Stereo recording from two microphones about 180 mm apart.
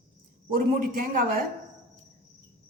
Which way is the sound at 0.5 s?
50° right (ahead or behind).